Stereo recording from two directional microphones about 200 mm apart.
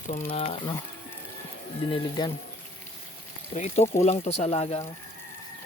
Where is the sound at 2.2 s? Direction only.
20° left (ahead or behind).